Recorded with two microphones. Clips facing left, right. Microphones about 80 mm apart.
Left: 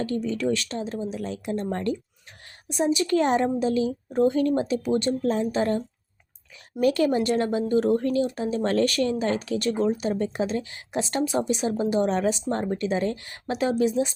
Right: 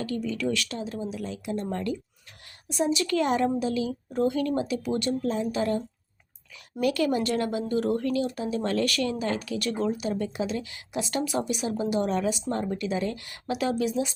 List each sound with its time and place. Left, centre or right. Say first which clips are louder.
0.0 s speech: left 3 dB; left
1.1 s a woman's voice: left 3 dB; left
2.6 s a woman's voice: left 3 dB; left
5.2 s speech: left 3 dB; left